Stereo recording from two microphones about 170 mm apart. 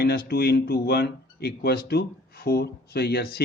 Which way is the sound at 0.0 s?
65° left (ahead or behind).